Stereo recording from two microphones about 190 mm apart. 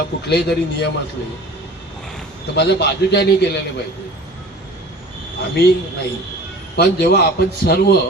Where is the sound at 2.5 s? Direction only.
60° left (ahead or behind).